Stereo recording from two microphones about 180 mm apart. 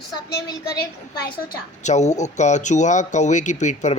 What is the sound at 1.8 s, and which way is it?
Speech, 40° left (ahead or behind).